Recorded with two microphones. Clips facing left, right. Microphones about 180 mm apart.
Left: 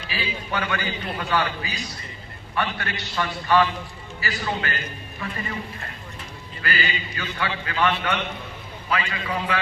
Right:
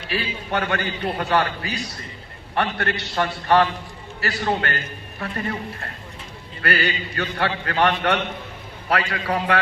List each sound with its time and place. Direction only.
0.1 s a man's voice: 55° right (ahead or behind)